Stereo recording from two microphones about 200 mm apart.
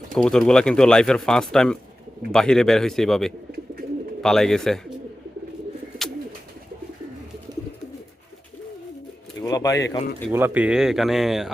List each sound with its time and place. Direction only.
0.1 s speech: centre (ahead or behind)
9.4 s pigeon: 15° left (ahead or behind)
10.2 s speech: 10° right (ahead or behind)